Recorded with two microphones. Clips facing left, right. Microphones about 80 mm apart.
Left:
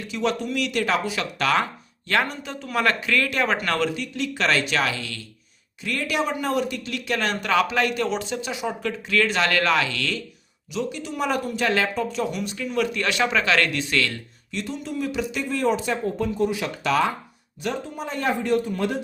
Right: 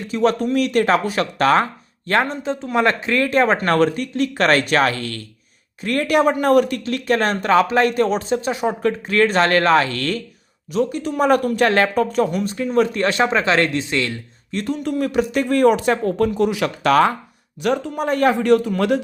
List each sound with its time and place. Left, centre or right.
0.1 s speech: right
6.8 s speech: right
14.5 s a man's voice: right